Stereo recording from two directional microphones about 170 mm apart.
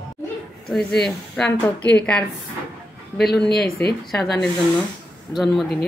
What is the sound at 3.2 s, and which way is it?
Speech, centre (ahead or behind).